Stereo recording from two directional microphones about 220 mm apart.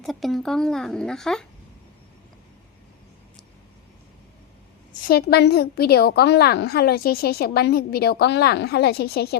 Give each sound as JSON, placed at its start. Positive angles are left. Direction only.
{"t": 0.0, "sound": "a woman's voice", "side_deg": 0}
{"t": 4.9, "sound": "a woman's voice", "side_deg": 40}